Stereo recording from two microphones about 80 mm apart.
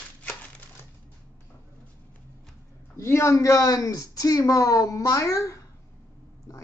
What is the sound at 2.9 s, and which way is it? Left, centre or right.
Speech, left.